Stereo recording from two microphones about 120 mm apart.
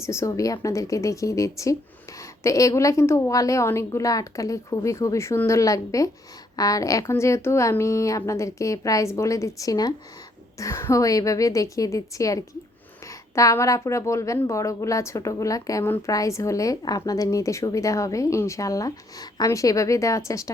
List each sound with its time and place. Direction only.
0.0 s a woman's voice: 25° left (ahead or behind)